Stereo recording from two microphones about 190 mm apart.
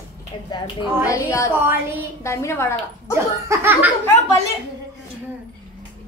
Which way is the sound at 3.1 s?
15° right (ahead or behind).